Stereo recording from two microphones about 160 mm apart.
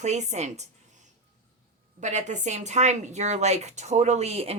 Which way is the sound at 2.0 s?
50° right (ahead or behind).